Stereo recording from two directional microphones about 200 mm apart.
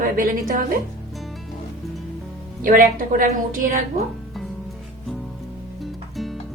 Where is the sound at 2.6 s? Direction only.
45° right (ahead or behind).